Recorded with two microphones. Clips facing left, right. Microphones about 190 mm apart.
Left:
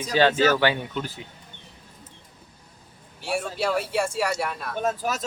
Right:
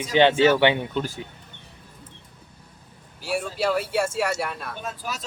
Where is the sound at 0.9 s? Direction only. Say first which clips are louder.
Right 4 dB; 45° right (ahead or behind).